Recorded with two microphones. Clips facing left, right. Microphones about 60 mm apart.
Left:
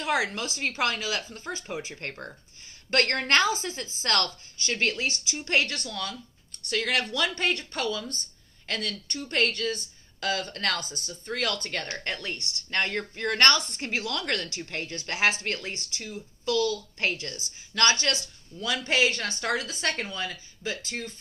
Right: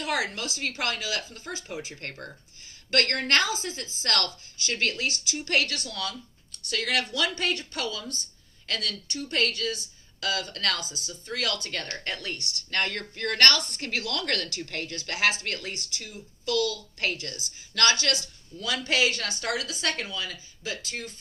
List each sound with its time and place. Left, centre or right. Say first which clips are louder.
0.0 s speech: left 2 dB; left